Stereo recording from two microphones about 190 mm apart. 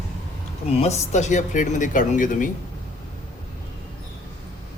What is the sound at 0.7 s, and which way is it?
Speech, 35° left (ahead or behind).